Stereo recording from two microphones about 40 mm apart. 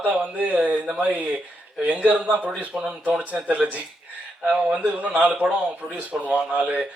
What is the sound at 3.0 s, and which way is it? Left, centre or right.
Speech, right.